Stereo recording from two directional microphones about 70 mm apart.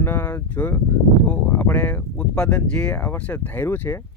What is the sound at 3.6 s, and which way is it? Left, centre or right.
Speech, left.